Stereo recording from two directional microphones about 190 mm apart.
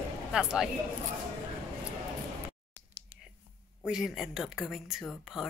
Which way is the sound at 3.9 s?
5° right (ahead or behind).